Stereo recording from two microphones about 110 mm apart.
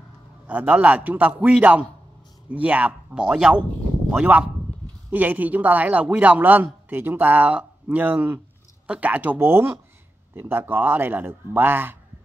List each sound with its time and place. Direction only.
0.5 s speech: 15° right (ahead or behind)